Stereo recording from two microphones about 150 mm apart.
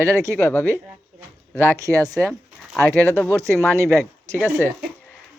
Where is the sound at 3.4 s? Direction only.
20° right (ahead or behind).